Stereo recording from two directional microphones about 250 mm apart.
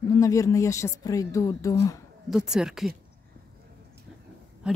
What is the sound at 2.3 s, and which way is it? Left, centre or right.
Speech, centre.